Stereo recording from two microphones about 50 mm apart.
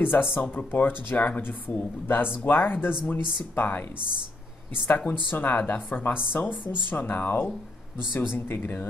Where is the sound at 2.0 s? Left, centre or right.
Left.